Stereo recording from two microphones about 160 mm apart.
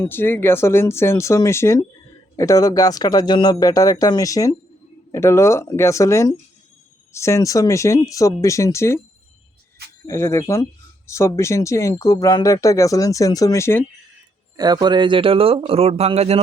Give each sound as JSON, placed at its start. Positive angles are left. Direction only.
{"t": 0.0, "sound": "speech", "side_deg": 15}
{"t": 10.1, "sound": "speech", "side_deg": 15}
{"t": 14.5, "sound": "speech", "side_deg": -25}